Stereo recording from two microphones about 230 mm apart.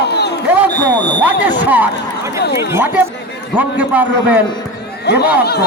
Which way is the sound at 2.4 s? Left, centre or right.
Left.